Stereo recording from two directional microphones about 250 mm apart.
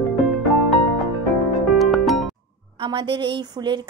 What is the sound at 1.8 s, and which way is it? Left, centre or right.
Music, centre.